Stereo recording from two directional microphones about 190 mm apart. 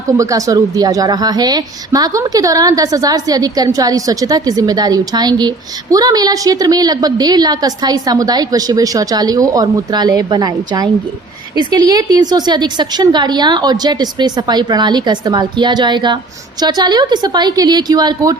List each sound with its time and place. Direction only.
0.2 s a woman's voice: 15° right (ahead or behind)